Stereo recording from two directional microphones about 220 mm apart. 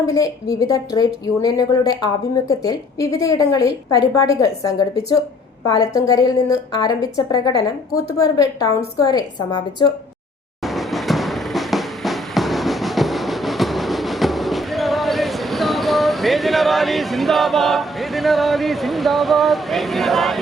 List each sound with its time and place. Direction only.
0.0 s a woman's voice: 15° left (ahead or behind)
3.2 s a woman's voice: 15° left (ahead or behind)
10.8 s music: centre (ahead or behind)